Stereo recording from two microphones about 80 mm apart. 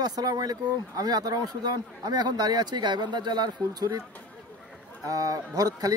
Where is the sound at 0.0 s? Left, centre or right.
Right.